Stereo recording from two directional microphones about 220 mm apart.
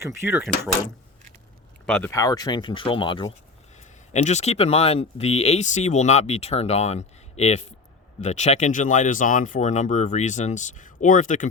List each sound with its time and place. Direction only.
0.0 s speech: 10° right (ahead or behind)
1.9 s speech: 10° left (ahead or behind); by 11.4 s 35° left (ahead or behind)